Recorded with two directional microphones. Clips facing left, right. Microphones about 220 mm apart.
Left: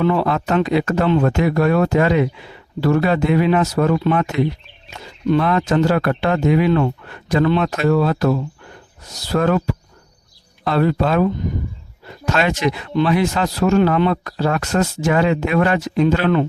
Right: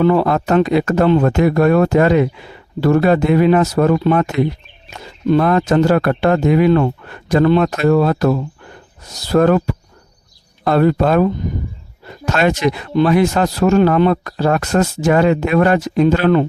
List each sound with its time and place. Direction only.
0.0 s speech: 40° right (ahead or behind)